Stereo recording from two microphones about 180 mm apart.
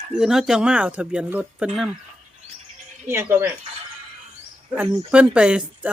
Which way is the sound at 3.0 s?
15° right (ahead or behind).